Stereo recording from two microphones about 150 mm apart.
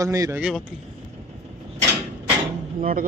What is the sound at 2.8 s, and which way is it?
Speech, 70° right (ahead or behind).